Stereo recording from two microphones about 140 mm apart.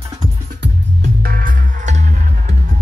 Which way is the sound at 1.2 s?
85° right.